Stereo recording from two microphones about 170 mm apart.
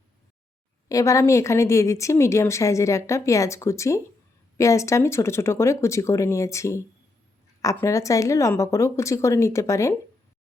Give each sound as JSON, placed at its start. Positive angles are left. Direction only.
{"t": 0.9, "sound": "a woman's voice", "side_deg": 20}